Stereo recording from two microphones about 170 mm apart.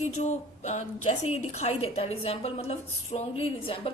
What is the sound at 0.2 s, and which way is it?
A woman's voice, 40° left (ahead or behind).